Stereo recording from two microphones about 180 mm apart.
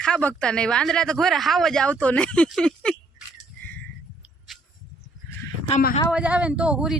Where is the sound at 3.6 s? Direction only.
10° left (ahead or behind).